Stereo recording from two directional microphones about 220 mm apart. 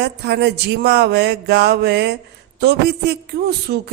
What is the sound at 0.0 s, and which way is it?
A woman's voice, 50° right (ahead or behind).